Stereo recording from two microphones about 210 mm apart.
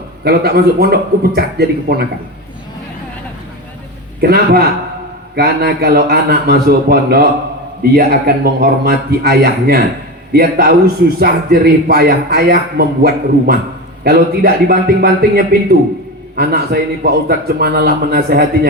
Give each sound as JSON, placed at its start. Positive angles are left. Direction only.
{"t": 0.3, "sound": "a man's voice", "side_deg": -50}
{"t": 4.2, "sound": "a man's voice", "side_deg": -50}